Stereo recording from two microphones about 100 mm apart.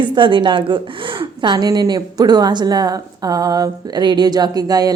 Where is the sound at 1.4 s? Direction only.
45° right (ahead or behind).